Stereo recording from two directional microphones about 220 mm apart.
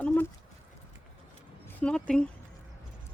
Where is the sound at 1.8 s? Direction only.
5° left (ahead or behind).